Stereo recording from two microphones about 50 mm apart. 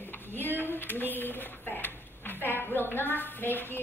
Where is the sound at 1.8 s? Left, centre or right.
Left.